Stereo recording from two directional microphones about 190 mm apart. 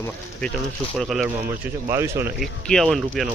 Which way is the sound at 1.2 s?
15° right (ahead or behind).